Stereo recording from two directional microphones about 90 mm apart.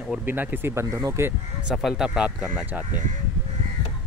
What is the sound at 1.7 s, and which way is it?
Speech, centre (ahead or behind).